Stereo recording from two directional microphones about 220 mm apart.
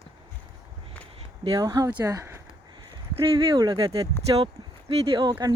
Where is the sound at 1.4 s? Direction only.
20° right (ahead or behind).